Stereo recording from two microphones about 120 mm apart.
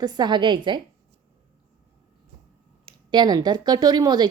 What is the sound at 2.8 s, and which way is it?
Speech, 40° right (ahead or behind).